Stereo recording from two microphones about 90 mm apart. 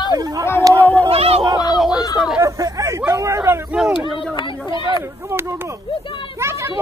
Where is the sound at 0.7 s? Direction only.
20° left (ahead or behind).